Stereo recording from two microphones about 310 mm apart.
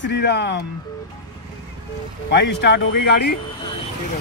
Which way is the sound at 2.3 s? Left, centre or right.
Left.